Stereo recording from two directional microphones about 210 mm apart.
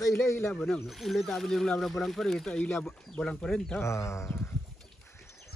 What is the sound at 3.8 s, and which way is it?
Speech, 15° left (ahead or behind).